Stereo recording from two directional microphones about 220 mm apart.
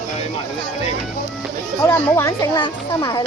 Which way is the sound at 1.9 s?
10° left (ahead or behind).